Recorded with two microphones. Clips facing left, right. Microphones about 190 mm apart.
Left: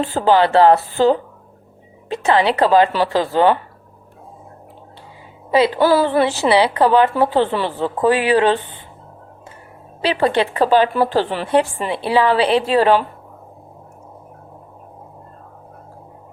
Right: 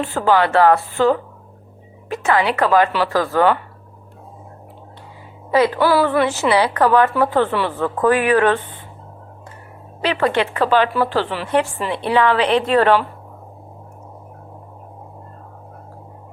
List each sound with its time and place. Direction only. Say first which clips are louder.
0.0 s a woman's voice: left 2 dB; 30° left (ahead or behind)
5.5 s a woman's voice: left 1 dB; 25° left (ahead or behind)
10.0 s speech: left 1 dB; 30° left (ahead or behind)